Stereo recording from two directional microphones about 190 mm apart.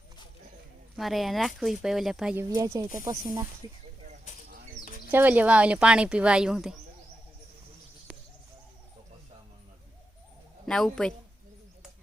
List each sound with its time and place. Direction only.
0.9 s speech: centre (ahead or behind); by 3.8 s 20° right (ahead or behind)
4.0 s a sound: 40° right (ahead or behind)
5.1 s speech: 10° right (ahead or behind)
10.7 s speech: centre (ahead or behind)